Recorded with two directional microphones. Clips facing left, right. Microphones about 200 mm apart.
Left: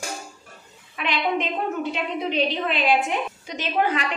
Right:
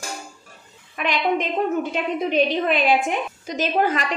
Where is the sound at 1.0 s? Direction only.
45° right (ahead or behind).